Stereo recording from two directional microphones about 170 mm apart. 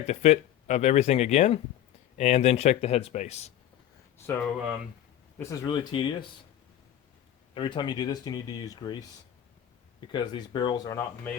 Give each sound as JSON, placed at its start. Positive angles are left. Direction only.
{"t": 0.1, "sound": "speech", "side_deg": 40}
{"t": 4.3, "sound": "speech", "side_deg": 15}
{"t": 7.5, "sound": "speech", "side_deg": 30}
{"t": 10.1, "sound": "speech", "side_deg": 25}